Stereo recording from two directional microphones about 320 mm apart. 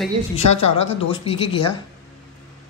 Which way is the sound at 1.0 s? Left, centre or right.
Centre.